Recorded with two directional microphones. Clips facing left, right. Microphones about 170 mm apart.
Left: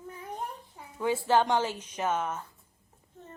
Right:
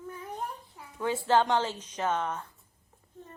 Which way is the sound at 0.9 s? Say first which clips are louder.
Even; 10° left (ahead or behind).